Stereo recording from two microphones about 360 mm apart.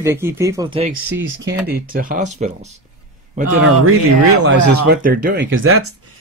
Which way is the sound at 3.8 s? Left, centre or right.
Right.